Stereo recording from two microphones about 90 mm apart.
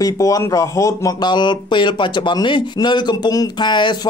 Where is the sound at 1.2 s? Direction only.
55° left (ahead or behind).